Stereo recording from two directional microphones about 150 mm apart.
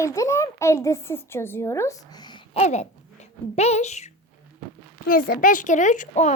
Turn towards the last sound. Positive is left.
turn(degrees=55)  # may be behind; listen again after turning